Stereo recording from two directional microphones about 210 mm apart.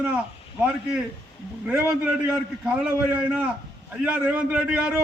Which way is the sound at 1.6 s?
5° right (ahead or behind).